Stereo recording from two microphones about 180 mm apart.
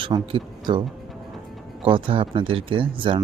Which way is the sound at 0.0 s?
30° right (ahead or behind).